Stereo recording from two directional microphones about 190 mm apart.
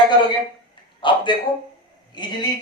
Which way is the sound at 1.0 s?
25° left (ahead or behind).